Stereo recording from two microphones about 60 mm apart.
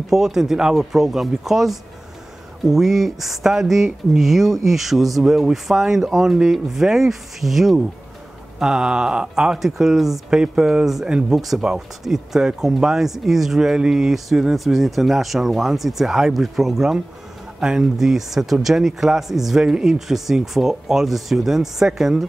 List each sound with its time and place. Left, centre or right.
0.1 s speech: centre
11.3 s speech: centre